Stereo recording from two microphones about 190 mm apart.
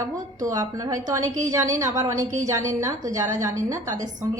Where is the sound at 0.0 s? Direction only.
15° right (ahead or behind).